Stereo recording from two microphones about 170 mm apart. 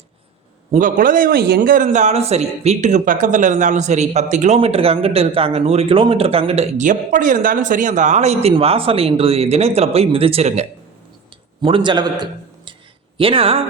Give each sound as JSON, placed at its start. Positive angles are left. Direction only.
{"t": 0.7, "sound": "a man's voice", "side_deg": -50}
{"t": 11.6, "sound": "a man's voice", "side_deg": -30}